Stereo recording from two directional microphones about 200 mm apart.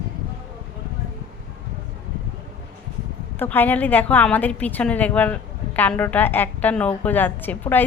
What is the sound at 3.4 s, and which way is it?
A woman's voice, 10° left (ahead or behind).